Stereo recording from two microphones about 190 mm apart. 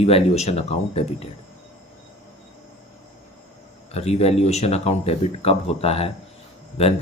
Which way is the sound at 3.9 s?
35° left (ahead or behind).